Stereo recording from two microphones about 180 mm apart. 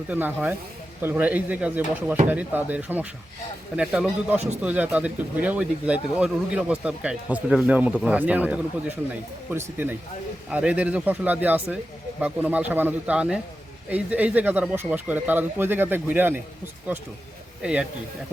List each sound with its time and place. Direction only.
0.1 s a man's voice: 10° right (ahead or behind)
4.4 s speech: 40° right (ahead or behind)
4.6 s speech: 10° right (ahead or behind)
17.6 s a man's voice: 5° right (ahead or behind)